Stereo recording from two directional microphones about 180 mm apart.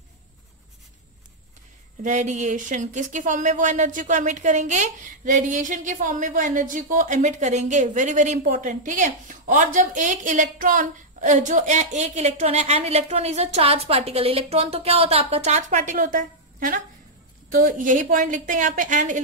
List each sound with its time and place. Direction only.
2.0 s speech: 40° right (ahead or behind)